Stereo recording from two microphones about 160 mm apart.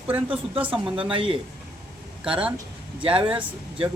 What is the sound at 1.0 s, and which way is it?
Speech, 30° right (ahead or behind).